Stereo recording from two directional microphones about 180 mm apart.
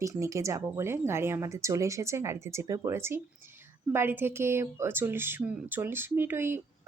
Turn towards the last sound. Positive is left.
turn(degrees=-10)  # may be behind; listen again after turning